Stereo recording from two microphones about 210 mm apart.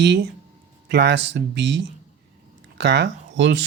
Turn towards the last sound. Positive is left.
turn(degrees=-55)  # may be behind; listen again after turning